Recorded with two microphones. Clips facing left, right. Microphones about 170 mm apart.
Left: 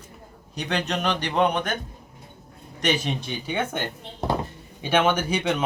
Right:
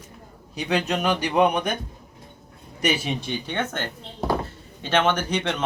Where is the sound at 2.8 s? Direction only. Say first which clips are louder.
Even; 5° right (ahead or behind).